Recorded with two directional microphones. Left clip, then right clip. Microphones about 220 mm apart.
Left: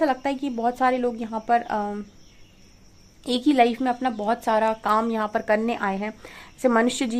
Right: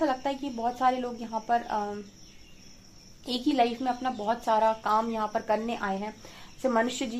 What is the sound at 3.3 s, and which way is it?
A woman's voice, 40° left (ahead or behind).